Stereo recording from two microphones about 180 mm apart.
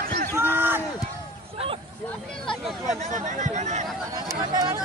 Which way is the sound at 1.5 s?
30° right (ahead or behind).